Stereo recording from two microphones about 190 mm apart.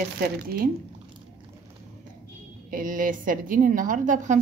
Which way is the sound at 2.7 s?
45° right (ahead or behind).